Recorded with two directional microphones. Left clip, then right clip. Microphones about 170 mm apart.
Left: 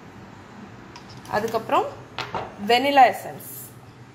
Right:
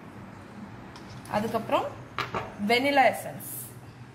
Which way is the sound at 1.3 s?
40° left (ahead or behind).